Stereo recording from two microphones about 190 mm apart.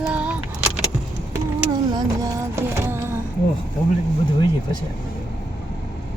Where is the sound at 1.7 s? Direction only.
20° right (ahead or behind).